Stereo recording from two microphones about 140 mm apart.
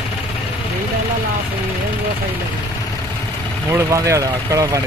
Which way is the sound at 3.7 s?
20° right (ahead or behind).